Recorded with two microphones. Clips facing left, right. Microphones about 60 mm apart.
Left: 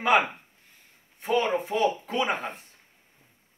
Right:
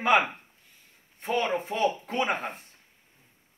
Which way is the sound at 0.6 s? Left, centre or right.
Left.